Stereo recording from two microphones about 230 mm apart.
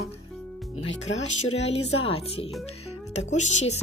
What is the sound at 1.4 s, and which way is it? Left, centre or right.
Speech, left.